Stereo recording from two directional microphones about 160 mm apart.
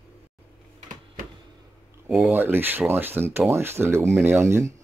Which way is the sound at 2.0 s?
10° right (ahead or behind).